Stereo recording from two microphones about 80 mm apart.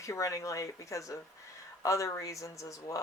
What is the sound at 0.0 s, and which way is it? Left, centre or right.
Speech, left.